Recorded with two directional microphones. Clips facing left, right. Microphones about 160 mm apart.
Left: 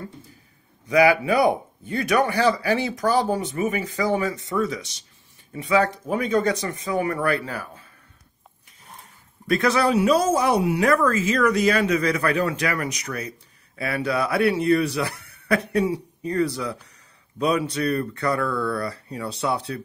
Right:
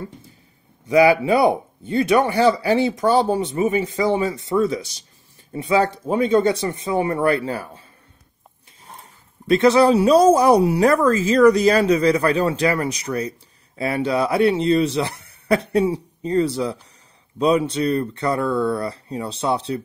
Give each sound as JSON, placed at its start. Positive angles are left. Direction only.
{"t": 0.8, "sound": "speech", "side_deg": -25}
{"t": 9.5, "sound": "speech", "side_deg": -25}